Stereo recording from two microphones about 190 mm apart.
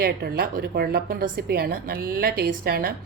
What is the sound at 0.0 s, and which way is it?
Speech, 55° right (ahead or behind).